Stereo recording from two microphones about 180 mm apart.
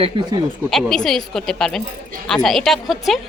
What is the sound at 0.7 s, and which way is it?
Speech, centre (ahead or behind).